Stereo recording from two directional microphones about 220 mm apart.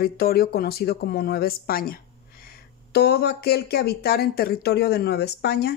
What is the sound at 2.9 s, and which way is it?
Speech, 45° left (ahead or behind).